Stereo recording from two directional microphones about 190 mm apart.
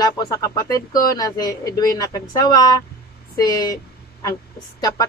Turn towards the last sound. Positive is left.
turn(degrees=20)  # may be behind; listen again after turning